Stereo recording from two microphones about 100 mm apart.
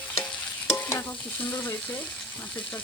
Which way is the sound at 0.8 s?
25° left (ahead or behind).